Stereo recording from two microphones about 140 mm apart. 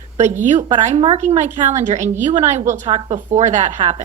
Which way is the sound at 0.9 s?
40° right (ahead or behind).